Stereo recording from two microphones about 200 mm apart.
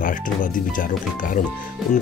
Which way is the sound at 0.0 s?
40° left (ahead or behind).